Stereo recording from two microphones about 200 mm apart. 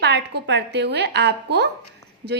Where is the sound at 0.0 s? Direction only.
55° right (ahead or behind).